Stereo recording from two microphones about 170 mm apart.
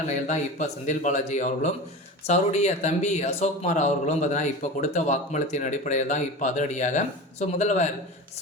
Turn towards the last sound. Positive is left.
turn(degrees=45)  # may be behind; listen again after turning